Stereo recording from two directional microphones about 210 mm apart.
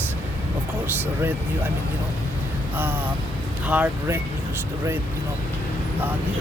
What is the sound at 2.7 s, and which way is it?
Speech, 10° right (ahead or behind).